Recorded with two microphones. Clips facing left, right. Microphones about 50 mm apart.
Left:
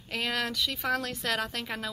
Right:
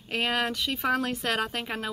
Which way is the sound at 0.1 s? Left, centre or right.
Right.